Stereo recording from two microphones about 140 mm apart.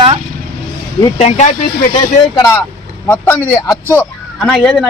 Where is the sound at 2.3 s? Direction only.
20° left (ahead or behind).